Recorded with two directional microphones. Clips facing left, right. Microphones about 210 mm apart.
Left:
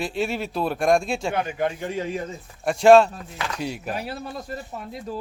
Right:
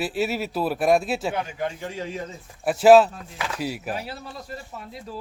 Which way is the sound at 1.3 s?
60° left (ahead or behind).